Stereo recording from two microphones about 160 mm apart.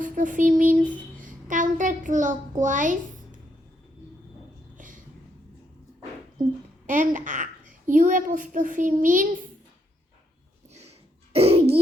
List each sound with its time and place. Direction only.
0.0 s child singing: 55° right (ahead or behind)
1.2 s a child's voice: 55° right (ahead or behind)
6.8 s a child's voice: 55° right (ahead or behind)
11.3 s laughter: 40° right (ahead or behind)